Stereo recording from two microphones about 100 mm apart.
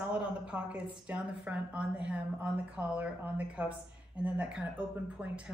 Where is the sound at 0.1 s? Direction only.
10° right (ahead or behind).